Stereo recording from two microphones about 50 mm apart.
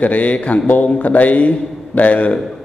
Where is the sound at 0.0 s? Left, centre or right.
Left.